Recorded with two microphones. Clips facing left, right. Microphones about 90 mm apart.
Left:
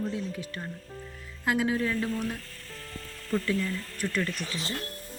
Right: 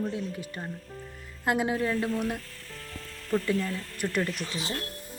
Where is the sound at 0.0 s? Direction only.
5° right (ahead or behind).